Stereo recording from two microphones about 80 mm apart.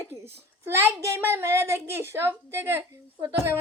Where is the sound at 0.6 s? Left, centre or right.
Right.